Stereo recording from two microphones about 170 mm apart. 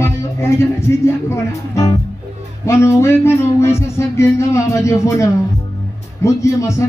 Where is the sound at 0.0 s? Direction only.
15° left (ahead or behind).